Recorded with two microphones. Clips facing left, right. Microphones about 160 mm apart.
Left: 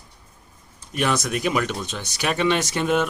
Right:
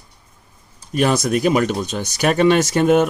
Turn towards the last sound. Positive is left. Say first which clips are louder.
# right 7 dB
turn(degrees=-45)  # may be behind; listen again after turning